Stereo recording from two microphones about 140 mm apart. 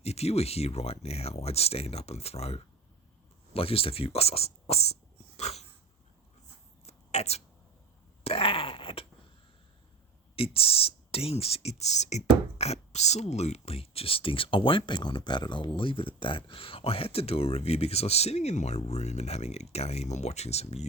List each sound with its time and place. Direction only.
0.0 s speech: 50° left (ahead or behind)
5.4 s dog: 50° left (ahead or behind)
6.8 s a sound: 50° left (ahead or behind)
8.2 s wail: 45° left (ahead or behind)
10.3 s speech: 45° left (ahead or behind)